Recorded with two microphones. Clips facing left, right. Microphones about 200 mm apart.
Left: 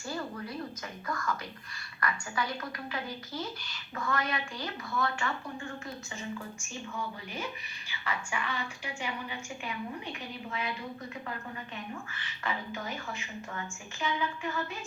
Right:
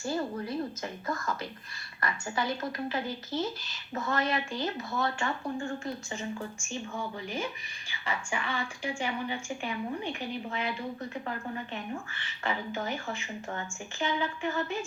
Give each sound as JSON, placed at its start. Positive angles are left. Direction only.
{"t": 0.0, "sound": "a woman's voice", "side_deg": -25}
{"t": 7.9, "sound": "a woman's voice", "side_deg": -30}
{"t": 12.4, "sound": "a woman's voice", "side_deg": -30}